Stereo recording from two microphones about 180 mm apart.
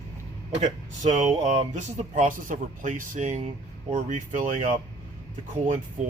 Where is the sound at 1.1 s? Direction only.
40° right (ahead or behind).